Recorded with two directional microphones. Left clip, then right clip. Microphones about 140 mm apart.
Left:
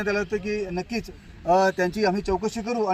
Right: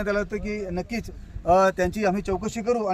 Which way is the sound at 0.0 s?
45° right (ahead or behind).